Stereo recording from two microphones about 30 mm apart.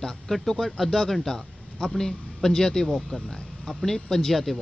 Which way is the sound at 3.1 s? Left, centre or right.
Left.